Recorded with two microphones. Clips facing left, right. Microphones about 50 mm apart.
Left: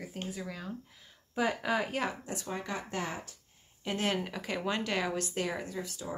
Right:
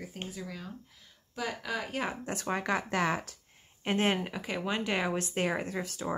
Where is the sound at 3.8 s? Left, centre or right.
Right.